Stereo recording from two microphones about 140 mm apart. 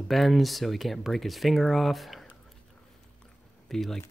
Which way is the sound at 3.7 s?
5° left (ahead or behind).